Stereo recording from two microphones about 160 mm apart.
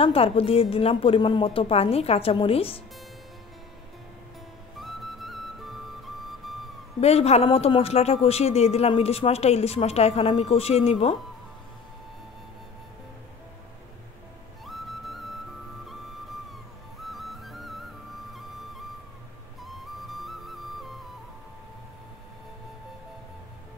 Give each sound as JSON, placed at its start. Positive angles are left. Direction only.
{"t": 0.0, "sound": "speech", "side_deg": 35}
{"t": 4.7, "sound": "flute", "side_deg": 0}
{"t": 7.0, "sound": "speech", "side_deg": 40}
{"t": 14.6, "sound": "music", "side_deg": 0}
{"t": 17.0, "sound": "music", "side_deg": 0}